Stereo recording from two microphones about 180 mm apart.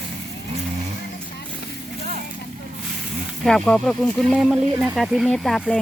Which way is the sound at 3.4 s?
5° left (ahead or behind).